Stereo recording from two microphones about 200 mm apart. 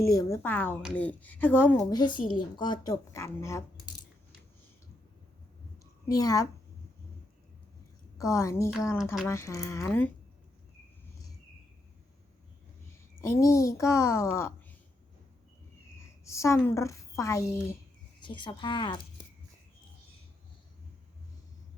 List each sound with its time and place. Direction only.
0.0 s speech: 15° left (ahead or behind)
1.9 s speech: 20° left (ahead or behind)
6.1 s speech: 15° left (ahead or behind)
8.2 s speech: 15° left (ahead or behind)
13.2 s speech: 15° left (ahead or behind)
16.0 s a woman's voice: 15° left (ahead or behind)